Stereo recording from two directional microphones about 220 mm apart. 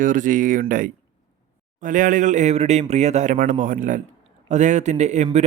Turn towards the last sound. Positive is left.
turn(degrees=-30)  # may be behind; listen again after turning